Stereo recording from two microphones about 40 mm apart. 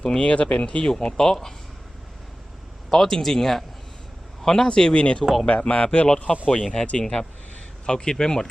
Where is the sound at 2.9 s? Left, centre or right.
Centre.